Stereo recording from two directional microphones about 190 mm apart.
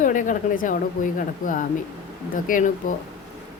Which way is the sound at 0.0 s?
45° left (ahead or behind).